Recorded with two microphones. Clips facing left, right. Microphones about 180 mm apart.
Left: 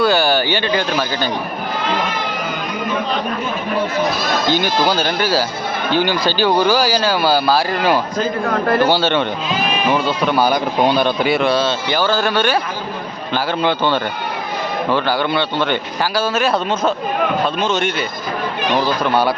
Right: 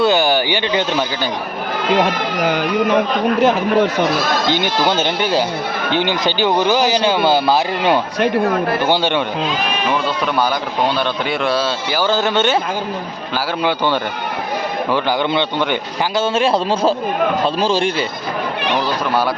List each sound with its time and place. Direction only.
0.0 s a man's voice: 20° right (ahead or behind)
2.0 s speech: 75° right (ahead or behind)
4.4 s a man's voice: 20° right (ahead or behind)
9.9 s speech: 5° left (ahead or behind)
12.0 s speech: 20° right (ahead or behind)
13.3 s a man's voice: 10° right (ahead or behind)
16.2 s speech: 25° right (ahead or behind)
18.9 s speech: centre (ahead or behind)